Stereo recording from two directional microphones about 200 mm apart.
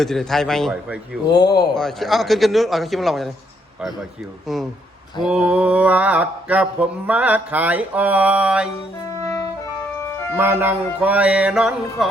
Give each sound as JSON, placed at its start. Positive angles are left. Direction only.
{"t": 0.0, "sound": "a man's voice", "side_deg": 0}
{"t": 1.3, "sound": "speech", "side_deg": 20}
{"t": 1.7, "sound": "a man's voice", "side_deg": 0}
{"t": 4.5, "sound": "a man's voice", "side_deg": 0}
{"t": 5.2, "sound": "mantra", "side_deg": -5}
{"t": 10.3, "sound": "mantra", "side_deg": -10}